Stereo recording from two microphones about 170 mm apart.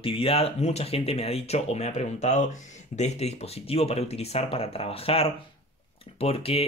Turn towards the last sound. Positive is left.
turn(degrees=35)  # may be behind; listen again after turning